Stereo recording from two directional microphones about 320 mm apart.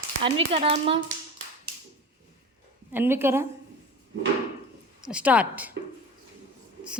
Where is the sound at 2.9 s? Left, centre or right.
Centre.